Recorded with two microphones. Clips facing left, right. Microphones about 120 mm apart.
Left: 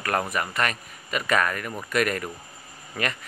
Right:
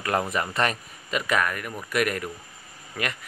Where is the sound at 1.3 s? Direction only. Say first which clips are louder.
Left 2 dB; 5° right (ahead or behind).